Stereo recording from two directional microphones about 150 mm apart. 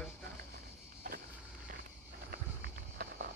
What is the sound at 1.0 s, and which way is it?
Vehicle, 60° right (ahead or behind).